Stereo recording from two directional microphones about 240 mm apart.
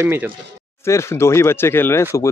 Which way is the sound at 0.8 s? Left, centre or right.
Centre.